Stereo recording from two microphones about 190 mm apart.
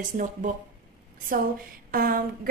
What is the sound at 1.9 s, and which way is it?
Speech, 50° right (ahead or behind).